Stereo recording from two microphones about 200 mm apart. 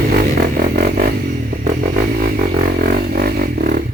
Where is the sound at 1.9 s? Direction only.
45° right (ahead or behind).